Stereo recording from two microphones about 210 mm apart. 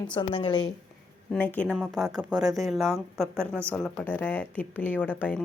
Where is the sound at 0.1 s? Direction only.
25° left (ahead or behind).